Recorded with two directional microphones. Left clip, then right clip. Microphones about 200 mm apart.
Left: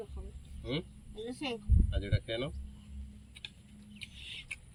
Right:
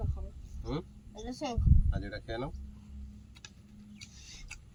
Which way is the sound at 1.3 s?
20° right (ahead or behind).